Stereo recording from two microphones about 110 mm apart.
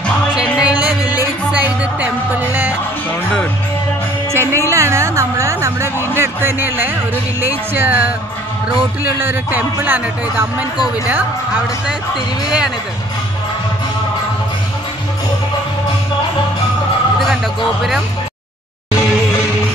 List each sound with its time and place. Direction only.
0.3 s music: 10° right (ahead or behind)
4.3 s music: 25° right (ahead or behind)
7.4 s speech: 20° right (ahead or behind)
9.2 s speech: 20° right (ahead or behind)